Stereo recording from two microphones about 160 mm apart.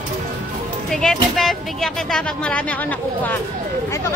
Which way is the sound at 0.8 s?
5° left (ahead or behind).